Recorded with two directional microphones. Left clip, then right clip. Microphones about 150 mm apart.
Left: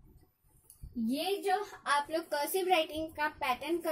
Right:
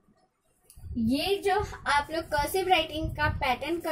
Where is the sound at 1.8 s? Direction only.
20° left (ahead or behind).